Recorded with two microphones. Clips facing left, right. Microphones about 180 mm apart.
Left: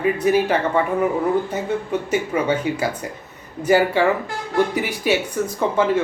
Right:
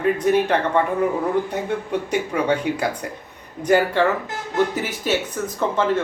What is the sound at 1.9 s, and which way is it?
Speech, 5° left (ahead or behind).